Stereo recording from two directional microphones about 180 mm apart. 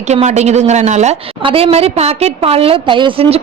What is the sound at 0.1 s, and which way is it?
A woman's voice, 40° right (ahead or behind).